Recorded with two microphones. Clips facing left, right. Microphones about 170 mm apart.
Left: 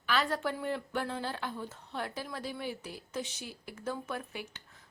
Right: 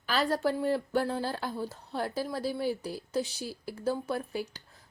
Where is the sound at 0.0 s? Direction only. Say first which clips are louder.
Right 4 dB; 35° right (ahead or behind).